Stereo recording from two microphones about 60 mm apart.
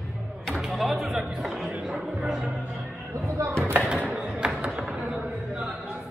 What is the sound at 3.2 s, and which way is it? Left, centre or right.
Music, right.